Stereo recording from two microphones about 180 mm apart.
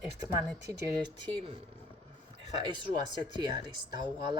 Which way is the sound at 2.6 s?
25° right (ahead or behind).